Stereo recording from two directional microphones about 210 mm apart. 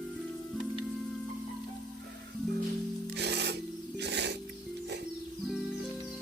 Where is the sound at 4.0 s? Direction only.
55° right (ahead or behind).